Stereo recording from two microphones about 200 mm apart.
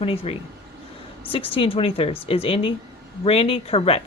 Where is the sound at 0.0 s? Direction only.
30° left (ahead or behind).